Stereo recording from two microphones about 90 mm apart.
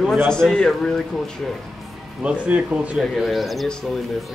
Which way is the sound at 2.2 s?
15° right (ahead or behind).